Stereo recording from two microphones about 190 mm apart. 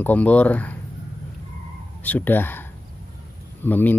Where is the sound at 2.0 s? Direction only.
10° left (ahead or behind).